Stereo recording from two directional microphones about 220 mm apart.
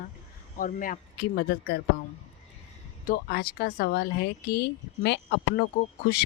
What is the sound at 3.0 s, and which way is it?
Speech, 45° left (ahead or behind).